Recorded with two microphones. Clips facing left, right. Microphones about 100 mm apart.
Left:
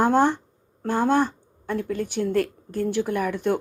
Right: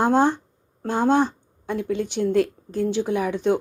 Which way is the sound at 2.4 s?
55° left (ahead or behind).